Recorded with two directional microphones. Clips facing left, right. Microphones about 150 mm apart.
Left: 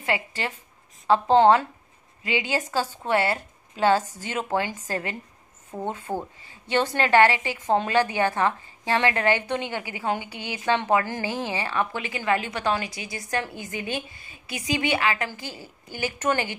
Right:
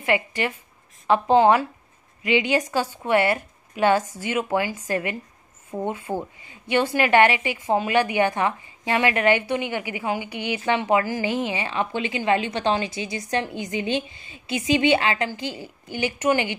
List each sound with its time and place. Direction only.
0.1 s a woman's voice: 15° right (ahead or behind)